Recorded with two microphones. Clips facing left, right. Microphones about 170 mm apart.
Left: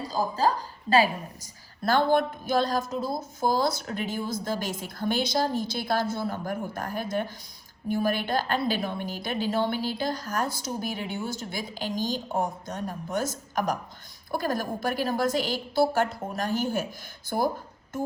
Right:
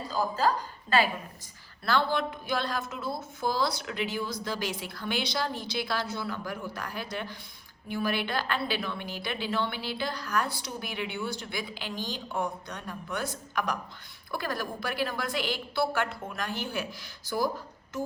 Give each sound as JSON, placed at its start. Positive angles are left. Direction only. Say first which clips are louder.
{"t": 0.1, "sound": "a woman's voice", "louder": "left 1 dB", "side_deg": 40}